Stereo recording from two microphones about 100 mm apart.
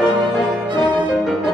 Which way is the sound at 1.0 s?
5° right (ahead or behind).